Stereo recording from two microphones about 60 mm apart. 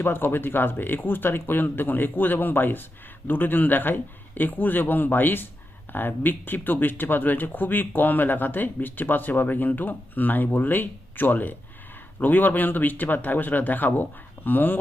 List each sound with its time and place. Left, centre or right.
0.0 s speech: left